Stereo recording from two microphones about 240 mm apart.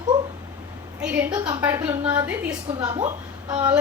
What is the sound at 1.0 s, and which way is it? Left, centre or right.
A woman's voice, centre.